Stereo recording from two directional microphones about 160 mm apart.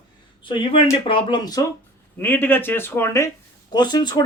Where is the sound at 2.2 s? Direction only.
15° left (ahead or behind).